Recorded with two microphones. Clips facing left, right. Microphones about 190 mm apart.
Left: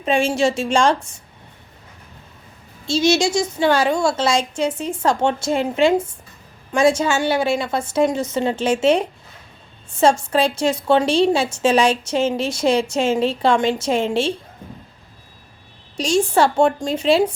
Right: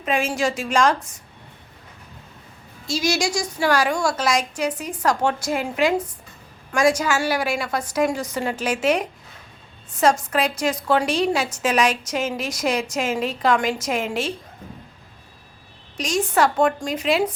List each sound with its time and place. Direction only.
0.0 s a woman's voice: 30° left (ahead or behind)
2.8 s a woman's voice: 25° left (ahead or behind)
16.0 s a woman's voice: 30° left (ahead or behind)